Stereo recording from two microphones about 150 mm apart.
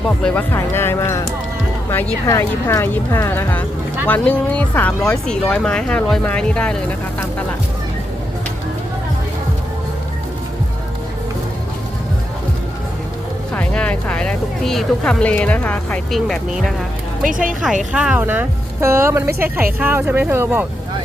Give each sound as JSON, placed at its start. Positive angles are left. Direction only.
{"t": 0.2, "sound": "speech", "side_deg": 5}
{"t": 0.5, "sound": "speech", "side_deg": 15}
{"t": 2.2, "sound": "speech", "side_deg": 20}
{"t": 13.5, "sound": "speech", "side_deg": 10}
{"t": 17.2, "sound": "speech", "side_deg": -65}
{"t": 17.9, "sound": "speech", "side_deg": -10}